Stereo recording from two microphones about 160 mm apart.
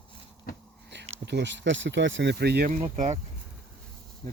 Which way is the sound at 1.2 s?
90° right.